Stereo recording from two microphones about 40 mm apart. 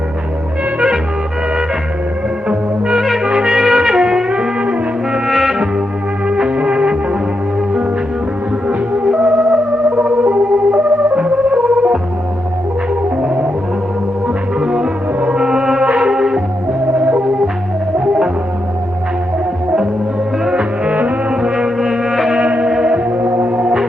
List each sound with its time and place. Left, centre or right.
2.5 s music: right
5.2 s music: centre
6.2 s music: right
9.1 s music: right
10.1 s organ: right
11.2 s music: right
14.6 s music: right
15.8 s music: right
16.1 s music: centre
20.5 s music: right
22.6 s music: right
23.0 s music: right
23.4 s music: right